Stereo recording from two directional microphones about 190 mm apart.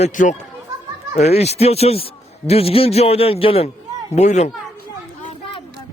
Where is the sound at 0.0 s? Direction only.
40° left (ahead or behind).